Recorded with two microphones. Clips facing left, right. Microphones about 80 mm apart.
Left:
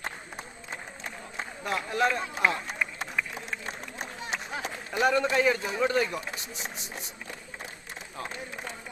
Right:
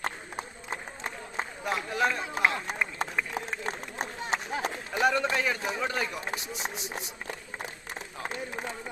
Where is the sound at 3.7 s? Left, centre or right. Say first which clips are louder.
Right 3 dB; right.